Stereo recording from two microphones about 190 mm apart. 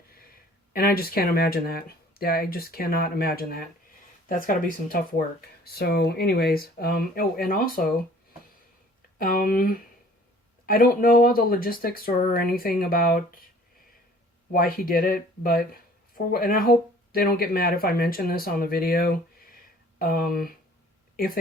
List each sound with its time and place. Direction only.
0.7 s speech: 50° left (ahead or behind)
9.1 s speech: 50° left (ahead or behind)
14.5 s speech: 50° left (ahead or behind)